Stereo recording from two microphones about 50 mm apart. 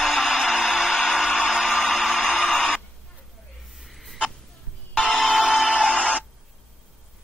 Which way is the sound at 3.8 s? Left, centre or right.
Centre.